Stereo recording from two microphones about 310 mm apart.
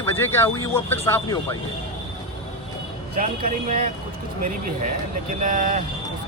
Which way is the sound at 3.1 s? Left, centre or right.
Right.